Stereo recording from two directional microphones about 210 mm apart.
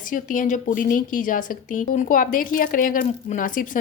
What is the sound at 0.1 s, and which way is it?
Speech, 40° left (ahead or behind).